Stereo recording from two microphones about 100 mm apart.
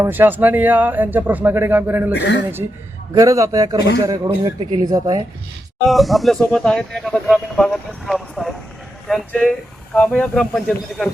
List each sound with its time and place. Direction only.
0.0 s speech: 20° right (ahead or behind)
3.2 s a man's voice: 35° right (ahead or behind)
5.9 s speech: centre (ahead or behind)
9.9 s speech: 10° left (ahead or behind)